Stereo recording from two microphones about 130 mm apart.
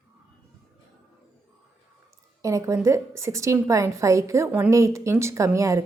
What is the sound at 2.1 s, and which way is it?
A woman's voice, 25° right (ahead or behind).